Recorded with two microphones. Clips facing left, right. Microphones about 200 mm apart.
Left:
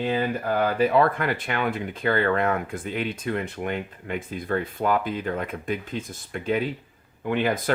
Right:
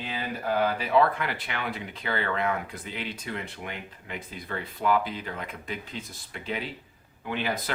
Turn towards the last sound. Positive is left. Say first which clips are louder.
# left 7 dB
turn(degrees=50)  # may be behind; listen again after turning